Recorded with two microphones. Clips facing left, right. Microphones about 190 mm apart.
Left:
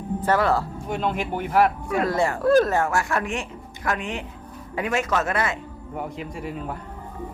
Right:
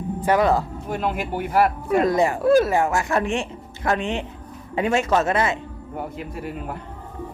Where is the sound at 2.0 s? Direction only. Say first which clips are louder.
Right 3 dB; 15° right (ahead or behind).